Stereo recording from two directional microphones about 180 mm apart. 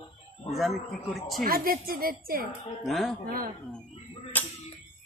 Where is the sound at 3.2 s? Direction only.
55° right (ahead or behind).